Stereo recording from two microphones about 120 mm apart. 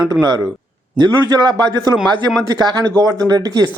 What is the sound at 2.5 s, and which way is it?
A man's voice, 35° right (ahead or behind).